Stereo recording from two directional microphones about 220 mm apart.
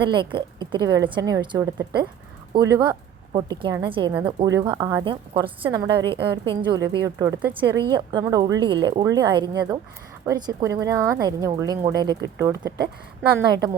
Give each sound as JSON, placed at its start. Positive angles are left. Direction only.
{"t": 0.1, "sound": "a woman's voice", "side_deg": -20}